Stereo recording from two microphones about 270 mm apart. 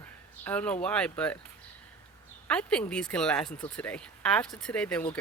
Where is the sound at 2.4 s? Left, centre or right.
Centre.